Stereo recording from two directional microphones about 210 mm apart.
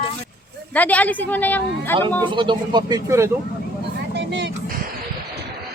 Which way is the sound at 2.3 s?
25° right (ahead or behind).